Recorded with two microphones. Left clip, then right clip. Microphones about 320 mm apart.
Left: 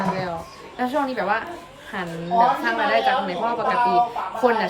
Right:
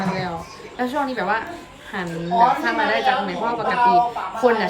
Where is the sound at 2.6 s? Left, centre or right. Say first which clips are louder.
Right 1 dB; centre.